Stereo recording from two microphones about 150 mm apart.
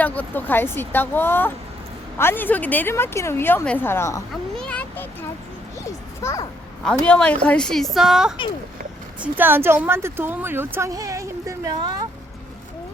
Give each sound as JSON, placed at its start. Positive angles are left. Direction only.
{"t": 0.0, "sound": "a woman's voice", "side_deg": 10}
{"t": 4.5, "sound": "a child's voice", "side_deg": 5}
{"t": 6.8, "sound": "a woman's voice", "side_deg": 5}